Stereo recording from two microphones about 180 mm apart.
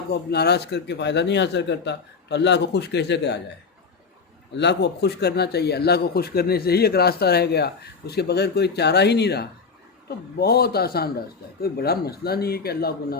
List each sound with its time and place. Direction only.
0.1 s speech: 65° left (ahead or behind)
4.5 s speech: 75° left (ahead or behind); by 13.1 s 60° left (ahead or behind)